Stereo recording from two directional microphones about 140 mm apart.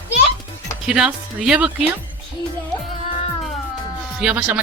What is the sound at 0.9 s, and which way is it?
Speech, 5° right (ahead or behind).